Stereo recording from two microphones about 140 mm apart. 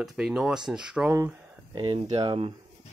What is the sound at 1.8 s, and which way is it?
Speech, 35° right (ahead or behind).